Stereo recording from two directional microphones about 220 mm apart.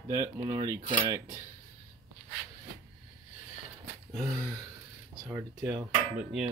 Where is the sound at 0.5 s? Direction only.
15° right (ahead or behind).